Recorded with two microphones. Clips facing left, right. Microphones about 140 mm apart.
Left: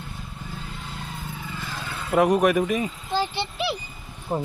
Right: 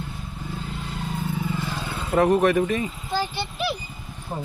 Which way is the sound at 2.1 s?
10° left (ahead or behind).